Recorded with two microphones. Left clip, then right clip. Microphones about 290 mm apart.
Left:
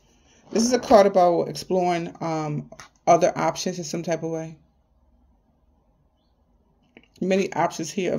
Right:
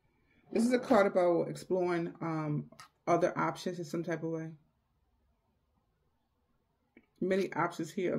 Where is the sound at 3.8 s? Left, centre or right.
Left.